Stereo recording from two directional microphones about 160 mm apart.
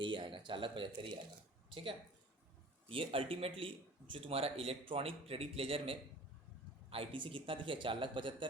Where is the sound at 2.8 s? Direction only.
35° right (ahead or behind).